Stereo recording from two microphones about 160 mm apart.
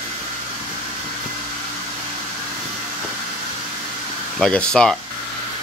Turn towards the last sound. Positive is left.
turn(degrees=5)  # may be behind; listen again after turning